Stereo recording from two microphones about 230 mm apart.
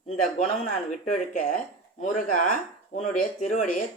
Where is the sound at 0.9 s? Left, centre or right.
Left.